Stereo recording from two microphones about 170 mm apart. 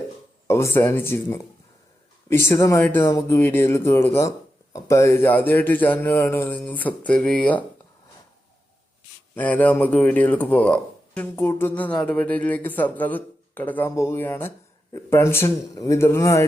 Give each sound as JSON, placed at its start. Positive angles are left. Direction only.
{"t": 0.4, "sound": "speech", "side_deg": 15}
{"t": 9.3, "sound": "speech", "side_deg": 10}